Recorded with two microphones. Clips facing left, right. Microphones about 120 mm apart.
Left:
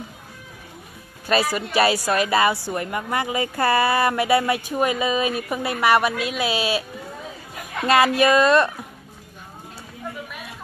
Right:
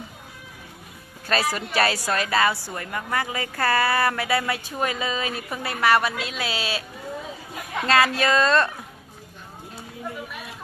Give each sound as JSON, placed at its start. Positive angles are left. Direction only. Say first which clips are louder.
{"t": 1.2, "sound": "a woman's voice", "louder": "left 3 dB", "side_deg": 10}
{"t": 7.8, "sound": "a woman's voice", "louder": "left 4 dB", "side_deg": 15}